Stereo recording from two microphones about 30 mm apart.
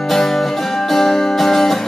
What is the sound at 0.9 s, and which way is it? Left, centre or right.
Music, centre.